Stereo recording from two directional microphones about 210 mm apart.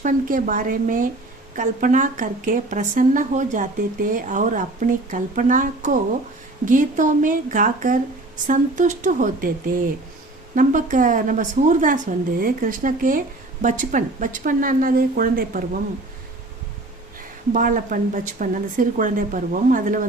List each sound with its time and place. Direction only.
0.0 s a woman's voice: 40° right (ahead or behind)
17.2 s a woman's voice: 40° right (ahead or behind)